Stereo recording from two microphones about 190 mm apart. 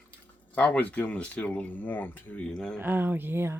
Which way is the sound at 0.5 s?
10° left (ahead or behind).